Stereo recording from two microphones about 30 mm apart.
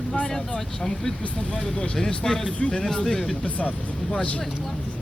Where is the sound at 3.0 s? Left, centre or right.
Centre.